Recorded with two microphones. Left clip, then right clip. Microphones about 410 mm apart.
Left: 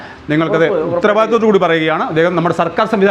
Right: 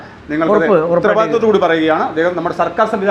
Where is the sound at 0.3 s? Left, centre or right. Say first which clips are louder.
Right 1 dB; left.